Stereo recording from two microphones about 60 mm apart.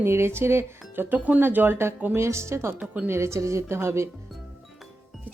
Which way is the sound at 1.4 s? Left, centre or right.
Right.